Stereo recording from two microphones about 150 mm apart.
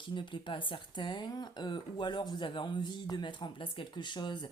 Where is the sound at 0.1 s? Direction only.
35° left (ahead or behind).